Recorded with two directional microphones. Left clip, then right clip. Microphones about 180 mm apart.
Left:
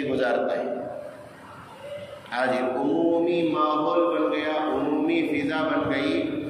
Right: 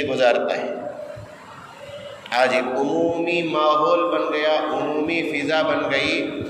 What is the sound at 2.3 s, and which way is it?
A man's voice, 40° right (ahead or behind).